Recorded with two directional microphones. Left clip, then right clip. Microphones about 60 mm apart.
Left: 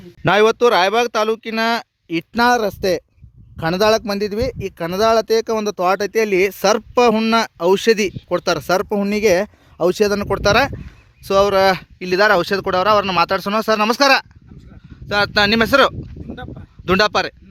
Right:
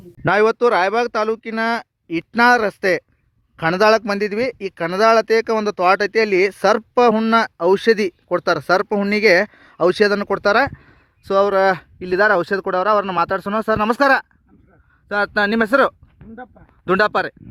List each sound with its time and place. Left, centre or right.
0.2 s speech: left